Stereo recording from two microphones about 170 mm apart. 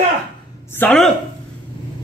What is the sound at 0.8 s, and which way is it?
Speech, 10° left (ahead or behind).